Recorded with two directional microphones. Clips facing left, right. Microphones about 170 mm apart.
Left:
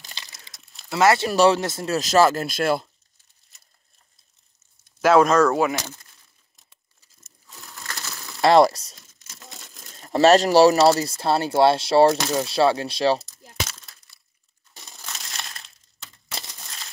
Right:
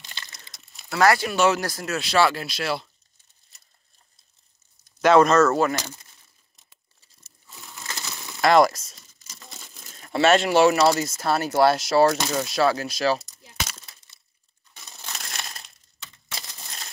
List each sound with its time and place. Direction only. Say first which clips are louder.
0.0 s a sound: even; centre (ahead or behind)
0.9 s speech: left 2 dB; 25° left (ahead or behind)
2.0 s speech: left 4 dB; 40° left (ahead or behind)
4.9 s speech: even; 5° left (ahead or behind)
6.5 s crumpling: even; centre (ahead or behind)
8.0 s a sound: even; centre (ahead or behind)
8.4 s a sound: left 2 dB; 30° left (ahead or behind)
8.9 s tearing: left 1 dB; centre (ahead or behind)
10.0 s speech: left 4 dB; 35° left (ahead or behind)
12.2 s speech: left 2 dB; centre (ahead or behind)
12.4 s speech: left 3 dB; 30° left (ahead or behind)
13.5 s breaking: left 3 dB; centre (ahead or behind)
14.8 s crushing: right 1 dB; centre (ahead or behind)
15.3 s a sound: even; centre (ahead or behind)